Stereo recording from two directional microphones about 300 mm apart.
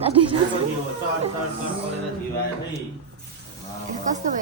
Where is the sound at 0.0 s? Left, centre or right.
Centre.